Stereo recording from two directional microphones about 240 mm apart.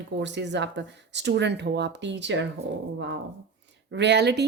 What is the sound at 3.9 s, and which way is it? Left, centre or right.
Speech, right.